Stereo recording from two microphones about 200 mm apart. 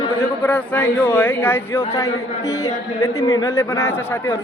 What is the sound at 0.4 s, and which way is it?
A man's voice, 5° left (ahead or behind).